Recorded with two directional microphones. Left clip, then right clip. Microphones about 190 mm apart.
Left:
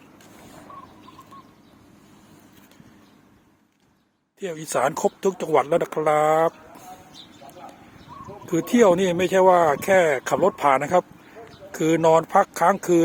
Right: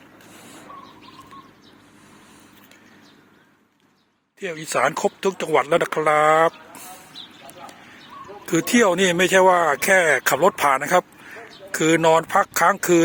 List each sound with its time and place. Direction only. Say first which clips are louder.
4.4 s speech: right 2 dB; 20° left (ahead or behind)
8.4 s speech: even; 5° left (ahead or behind)